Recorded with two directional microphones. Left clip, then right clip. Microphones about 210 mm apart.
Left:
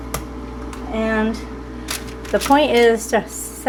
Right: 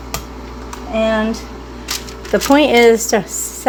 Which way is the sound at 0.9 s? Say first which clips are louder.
Right 5 dB; 25° right (ahead or behind).